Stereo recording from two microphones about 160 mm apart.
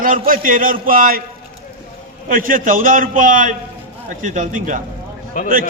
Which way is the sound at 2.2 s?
60° right (ahead or behind).